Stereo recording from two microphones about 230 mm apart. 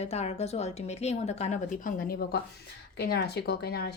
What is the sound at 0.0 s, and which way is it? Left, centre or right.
A woman's voice, left.